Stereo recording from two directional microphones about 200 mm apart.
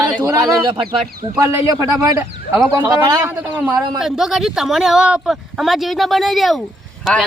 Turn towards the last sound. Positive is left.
turn(degrees=0)  # may be behind; listen again after turning